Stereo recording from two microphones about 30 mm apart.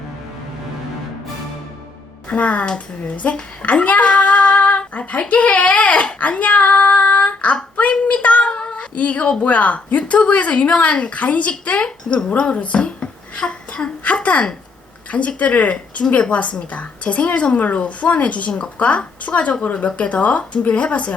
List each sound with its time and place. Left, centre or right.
2.3 s a woman's voice: left
3.6 s speech: left
4.0 s female singing: left
5.3 s child singing: left
8.5 s cat: left
9.0 s a woman's voice: left
13.4 s a child's voice: left
14.0 s a woman's voice: left
15.4 s a woman's voice: left
17.6 s a woman's voice: left